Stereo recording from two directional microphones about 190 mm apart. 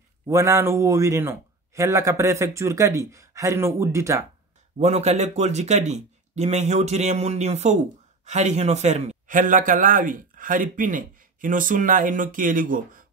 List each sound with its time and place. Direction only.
0.3 s a man's voice: 15° right (ahead or behind)
4.7 s a man's voice: 35° right (ahead or behind)